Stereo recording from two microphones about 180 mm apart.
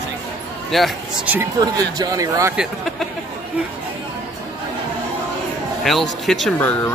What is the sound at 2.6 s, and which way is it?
Speech, centre (ahead or behind).